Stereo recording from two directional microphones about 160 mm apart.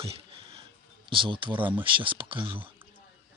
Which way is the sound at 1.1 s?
30° right (ahead or behind).